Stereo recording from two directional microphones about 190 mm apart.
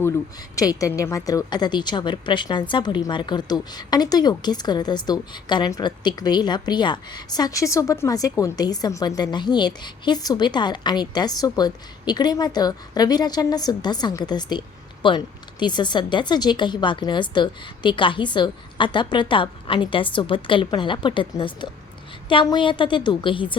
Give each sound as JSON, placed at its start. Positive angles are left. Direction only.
{"t": 0.5, "sound": "a woman's voice", "side_deg": 20}